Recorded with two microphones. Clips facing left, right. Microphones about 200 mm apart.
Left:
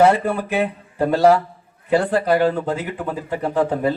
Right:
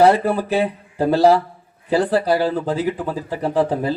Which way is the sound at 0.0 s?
35° right (ahead or behind).